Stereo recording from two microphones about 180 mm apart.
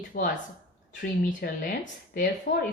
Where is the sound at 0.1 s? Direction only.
50° left (ahead or behind).